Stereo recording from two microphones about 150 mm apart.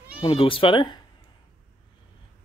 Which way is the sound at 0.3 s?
35° left (ahead or behind).